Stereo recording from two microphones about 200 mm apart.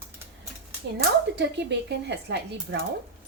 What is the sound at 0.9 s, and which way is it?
Speech, 60° right (ahead or behind).